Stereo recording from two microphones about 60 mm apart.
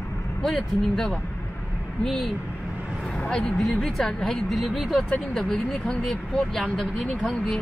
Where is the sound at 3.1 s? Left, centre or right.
Centre.